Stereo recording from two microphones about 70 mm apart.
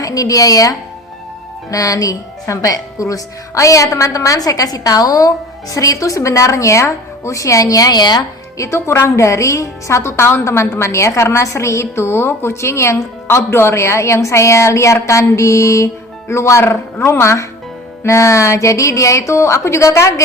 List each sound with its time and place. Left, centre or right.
0.0 s a woman's voice: left
8.5 s a woman's voice: left